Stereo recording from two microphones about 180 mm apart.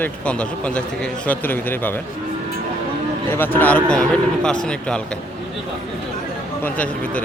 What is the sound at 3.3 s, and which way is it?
A man's voice, 10° left (ahead or behind).